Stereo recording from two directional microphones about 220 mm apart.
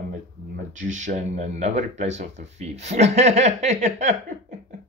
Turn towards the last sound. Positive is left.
turn(degrees=-30)  # may be behind; listen again after turning